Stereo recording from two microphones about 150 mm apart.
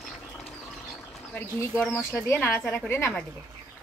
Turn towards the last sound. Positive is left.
turn(degrees=15)  # may be behind; listen again after turning